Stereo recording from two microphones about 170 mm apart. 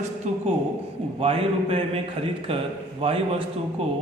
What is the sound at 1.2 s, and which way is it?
Speech, 35° right (ahead or behind).